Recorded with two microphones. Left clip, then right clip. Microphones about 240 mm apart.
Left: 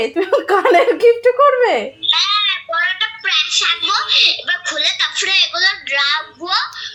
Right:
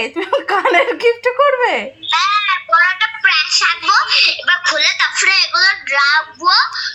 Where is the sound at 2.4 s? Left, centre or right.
Centre.